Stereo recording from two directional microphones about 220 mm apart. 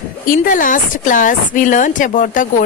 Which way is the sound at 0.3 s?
40° left (ahead or behind).